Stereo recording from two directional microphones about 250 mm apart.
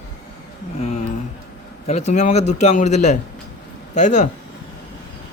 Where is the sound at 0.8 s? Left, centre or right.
Left.